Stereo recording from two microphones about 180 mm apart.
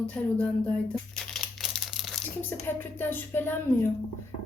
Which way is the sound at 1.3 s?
Centre (ahead or behind).